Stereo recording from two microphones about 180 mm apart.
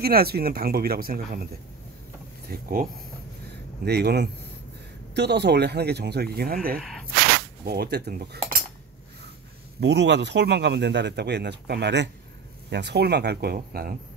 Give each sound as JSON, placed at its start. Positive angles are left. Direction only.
{"t": 0.0, "sound": "speech", "side_deg": -60}
{"t": 2.5, "sound": "speech", "side_deg": -50}
{"t": 3.8, "sound": "speech", "side_deg": -65}
{"t": 6.8, "sound": "a sound", "side_deg": 0}
{"t": 7.6, "sound": "speech", "side_deg": -60}
{"t": 9.8, "sound": "a man's voice", "side_deg": -70}